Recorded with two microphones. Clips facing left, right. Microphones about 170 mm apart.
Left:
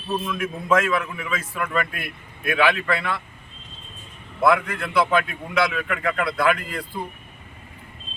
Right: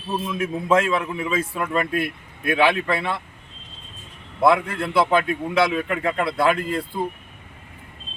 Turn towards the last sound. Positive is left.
turn(degrees=-25)  # may be behind; listen again after turning